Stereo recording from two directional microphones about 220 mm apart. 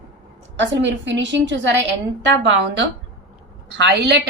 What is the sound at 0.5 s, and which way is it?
A woman's voice, 55° right (ahead or behind).